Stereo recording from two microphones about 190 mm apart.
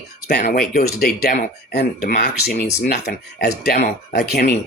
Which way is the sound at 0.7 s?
55° left (ahead or behind).